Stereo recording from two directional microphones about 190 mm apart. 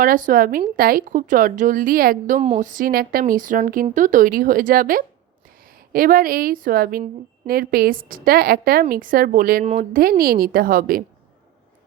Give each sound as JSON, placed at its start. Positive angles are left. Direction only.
{"t": 0.0, "sound": "a woman's voice", "side_deg": -45}
{"t": 9.6, "sound": "speech", "side_deg": -35}
{"t": 10.0, "sound": "a woman's voice", "side_deg": -50}